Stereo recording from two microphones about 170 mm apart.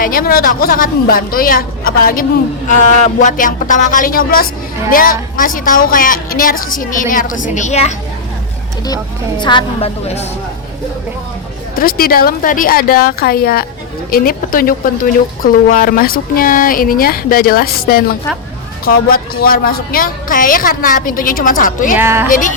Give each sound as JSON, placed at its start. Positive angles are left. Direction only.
{"t": 0.0, "sound": "a woman's voice", "side_deg": 55}
{"t": 2.6, "sound": "a woman's voice", "side_deg": 45}
{"t": 9.4, "sound": "a woman's voice", "side_deg": 30}
{"t": 11.8, "sound": "a woman's voice", "side_deg": 60}
{"t": 21.9, "sound": "speech", "side_deg": -15}
{"t": 22.3, "sound": "a woman's voice", "side_deg": 50}